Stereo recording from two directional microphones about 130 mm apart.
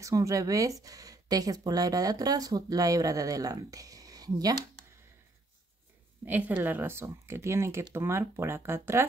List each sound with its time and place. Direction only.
0.0 s speech: 25° right (ahead or behind)
6.2 s speech: 10° right (ahead or behind)